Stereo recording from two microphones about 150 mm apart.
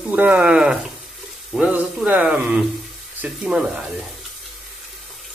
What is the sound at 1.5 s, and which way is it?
Speech, 5° right (ahead or behind).